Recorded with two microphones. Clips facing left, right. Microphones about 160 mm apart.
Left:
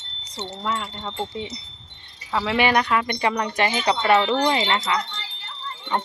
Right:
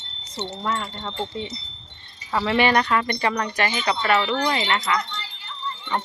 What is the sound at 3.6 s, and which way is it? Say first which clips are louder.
Wind chime: left 2 dB; 20° left (ahead or behind).